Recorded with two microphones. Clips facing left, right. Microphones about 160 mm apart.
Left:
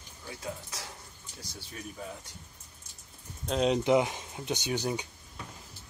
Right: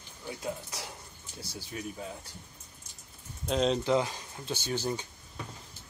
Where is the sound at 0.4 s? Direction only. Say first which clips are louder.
Right 2 dB; 20° right (ahead or behind).